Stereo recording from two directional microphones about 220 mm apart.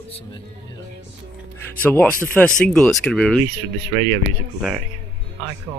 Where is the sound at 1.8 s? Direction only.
5° left (ahead or behind).